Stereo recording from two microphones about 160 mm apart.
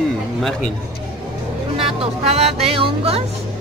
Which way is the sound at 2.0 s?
40° right (ahead or behind).